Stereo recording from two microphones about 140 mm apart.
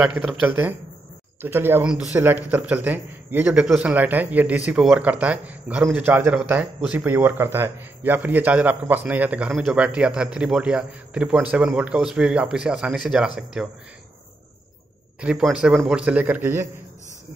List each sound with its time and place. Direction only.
0.0 s a man's voice: 10° right (ahead or behind)
15.1 s a man's voice: 5° right (ahead or behind)